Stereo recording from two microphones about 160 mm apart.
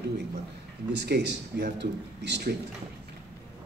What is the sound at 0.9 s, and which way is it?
A man's voice, 90° right.